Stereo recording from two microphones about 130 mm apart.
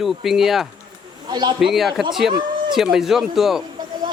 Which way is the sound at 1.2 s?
35° right (ahead or behind).